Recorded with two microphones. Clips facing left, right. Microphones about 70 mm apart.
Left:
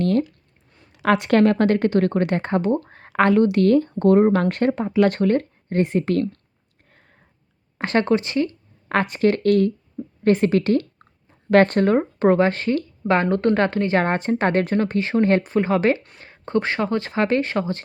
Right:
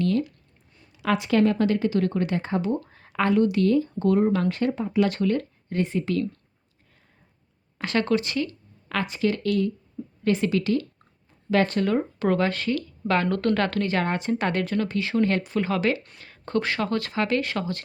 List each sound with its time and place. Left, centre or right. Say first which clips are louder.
0.0 s a sound: left 4 dB; left
1.0 s speech: left 5 dB; left
7.8 s speech: left 4 dB; left
8.9 s speech: left 6 dB; left